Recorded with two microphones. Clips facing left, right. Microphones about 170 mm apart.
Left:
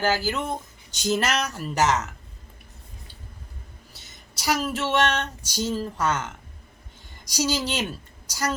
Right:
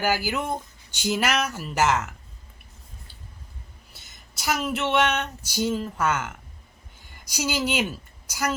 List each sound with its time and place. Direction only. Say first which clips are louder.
0.0 s speech: left 1 dB; 10° right (ahead or behind)
4.4 s a woman's voice: left 1 dB; centre (ahead or behind)